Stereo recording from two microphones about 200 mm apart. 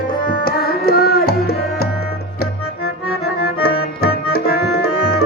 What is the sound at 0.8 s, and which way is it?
Music, 50° left (ahead or behind).